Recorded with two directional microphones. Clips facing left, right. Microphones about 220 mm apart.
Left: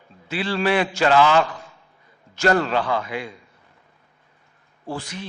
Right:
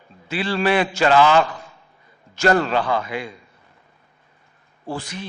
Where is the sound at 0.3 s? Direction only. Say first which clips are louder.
Right 1 dB; 10° right (ahead or behind).